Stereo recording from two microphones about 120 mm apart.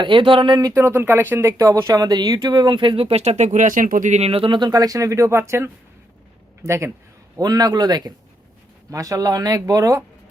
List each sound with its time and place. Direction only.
0.0 s speech: 45° right (ahead or behind)
0.6 s speech: 20° right (ahead or behind)